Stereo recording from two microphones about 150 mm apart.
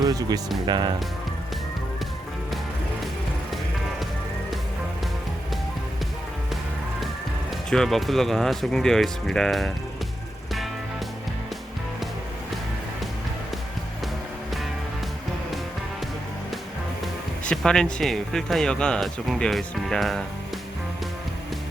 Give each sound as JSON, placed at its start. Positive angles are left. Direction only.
{"t": 0.0, "sound": "speech", "side_deg": -25}
{"t": 7.7, "sound": "speech", "side_deg": 0}
{"t": 17.0, "sound": "speech", "side_deg": 5}